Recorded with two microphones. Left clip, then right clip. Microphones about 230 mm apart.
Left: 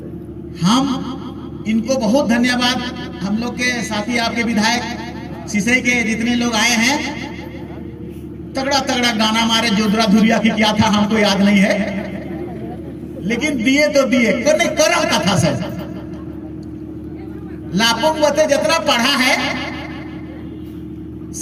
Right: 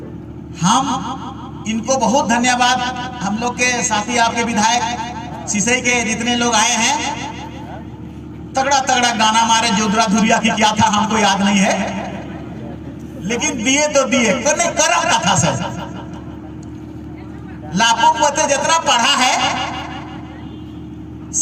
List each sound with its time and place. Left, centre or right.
0.6 s a man's voice: right
8.5 s a man's voice: right
13.3 s a man's voice: right
17.7 s a man's voice: right